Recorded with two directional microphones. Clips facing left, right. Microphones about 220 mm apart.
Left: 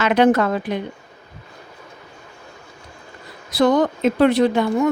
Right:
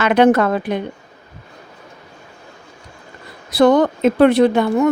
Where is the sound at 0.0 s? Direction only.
60° right (ahead or behind).